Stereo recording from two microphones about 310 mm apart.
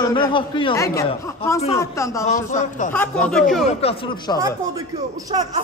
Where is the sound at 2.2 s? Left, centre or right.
Left.